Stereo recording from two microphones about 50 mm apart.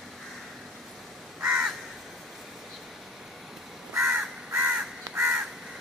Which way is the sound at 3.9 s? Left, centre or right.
Centre.